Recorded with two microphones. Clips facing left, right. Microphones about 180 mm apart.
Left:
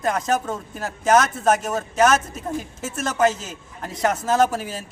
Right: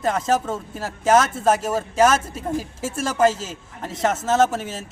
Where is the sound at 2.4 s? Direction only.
30° right (ahead or behind).